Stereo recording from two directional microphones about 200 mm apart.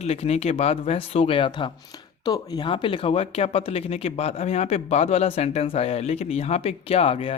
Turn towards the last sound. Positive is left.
turn(degrees=30)  # may be behind; listen again after turning